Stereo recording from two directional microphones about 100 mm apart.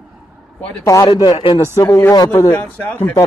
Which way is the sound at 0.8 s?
35° left (ahead or behind).